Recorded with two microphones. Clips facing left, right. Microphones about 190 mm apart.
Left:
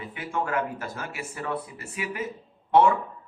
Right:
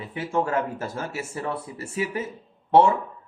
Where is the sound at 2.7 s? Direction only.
25° right (ahead or behind).